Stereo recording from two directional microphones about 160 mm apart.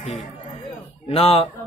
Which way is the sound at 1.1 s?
35° left (ahead or behind).